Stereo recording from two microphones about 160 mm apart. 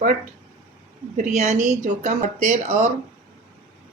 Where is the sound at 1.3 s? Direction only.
45° right (ahead or behind).